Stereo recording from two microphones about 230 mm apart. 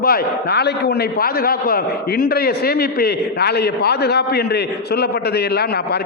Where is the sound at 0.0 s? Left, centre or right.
Left.